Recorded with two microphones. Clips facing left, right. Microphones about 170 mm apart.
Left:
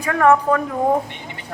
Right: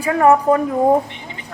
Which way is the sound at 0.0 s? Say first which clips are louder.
Right 2 dB; 15° right (ahead or behind).